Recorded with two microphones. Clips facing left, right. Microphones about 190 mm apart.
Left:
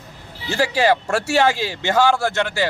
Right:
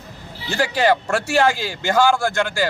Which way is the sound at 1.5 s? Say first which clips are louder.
Left 1 dB; 25° left (ahead or behind).